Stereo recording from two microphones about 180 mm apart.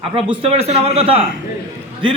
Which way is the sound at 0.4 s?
35° right (ahead or behind).